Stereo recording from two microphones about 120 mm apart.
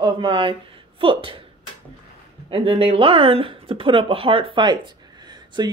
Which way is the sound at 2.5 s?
50° right (ahead or behind).